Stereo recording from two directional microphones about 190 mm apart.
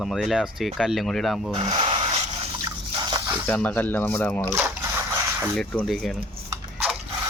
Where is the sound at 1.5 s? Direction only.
30° right (ahead or behind).